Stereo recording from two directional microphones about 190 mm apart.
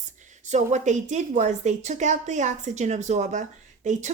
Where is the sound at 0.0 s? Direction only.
40° right (ahead or behind).